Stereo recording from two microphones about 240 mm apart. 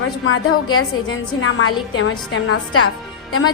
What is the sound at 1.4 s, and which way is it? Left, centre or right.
Speech, left.